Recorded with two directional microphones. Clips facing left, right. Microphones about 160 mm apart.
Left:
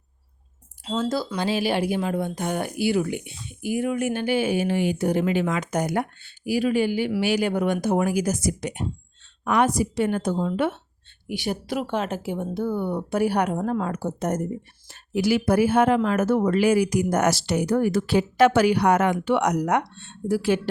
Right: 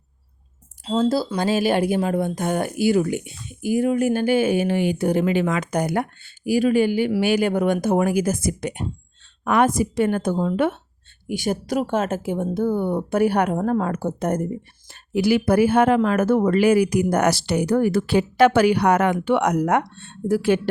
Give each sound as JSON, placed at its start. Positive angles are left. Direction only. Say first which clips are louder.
{"t": 0.9, "sound": "speech", "louder": "right 5 dB", "side_deg": -30}